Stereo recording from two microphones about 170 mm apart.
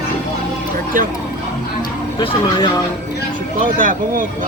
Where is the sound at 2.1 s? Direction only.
30° left (ahead or behind).